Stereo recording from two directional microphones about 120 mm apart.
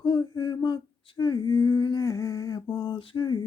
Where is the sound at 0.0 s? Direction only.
40° left (ahead or behind).